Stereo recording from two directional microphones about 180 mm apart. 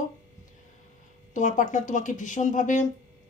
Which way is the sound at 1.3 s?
45° left (ahead or behind).